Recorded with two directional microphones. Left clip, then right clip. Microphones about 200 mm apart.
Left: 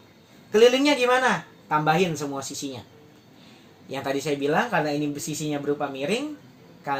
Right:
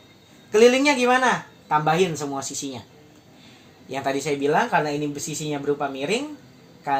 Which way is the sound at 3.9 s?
25° right (ahead or behind).